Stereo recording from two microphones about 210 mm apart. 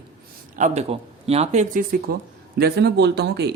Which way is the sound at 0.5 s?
35° right (ahead or behind).